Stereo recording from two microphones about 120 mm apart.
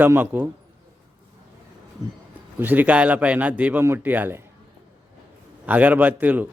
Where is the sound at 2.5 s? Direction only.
15° right (ahead or behind).